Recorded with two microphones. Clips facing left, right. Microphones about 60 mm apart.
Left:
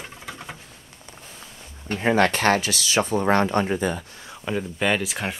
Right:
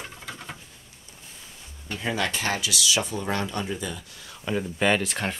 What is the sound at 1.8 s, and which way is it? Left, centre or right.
Speech, left.